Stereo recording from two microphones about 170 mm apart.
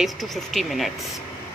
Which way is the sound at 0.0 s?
Centre (ahead or behind).